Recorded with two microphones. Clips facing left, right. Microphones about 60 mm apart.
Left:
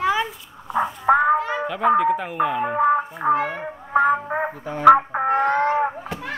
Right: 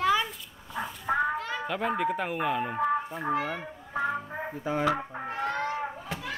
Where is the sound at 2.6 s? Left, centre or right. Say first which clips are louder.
Left 9 dB; left.